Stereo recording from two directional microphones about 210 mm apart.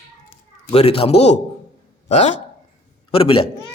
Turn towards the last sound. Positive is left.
turn(degrees=25)  # may be behind; listen again after turning